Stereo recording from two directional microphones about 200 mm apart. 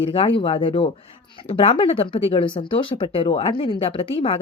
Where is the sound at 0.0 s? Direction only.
30° left (ahead or behind).